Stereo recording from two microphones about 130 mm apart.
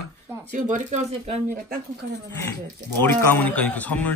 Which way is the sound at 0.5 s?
75° right (ahead or behind).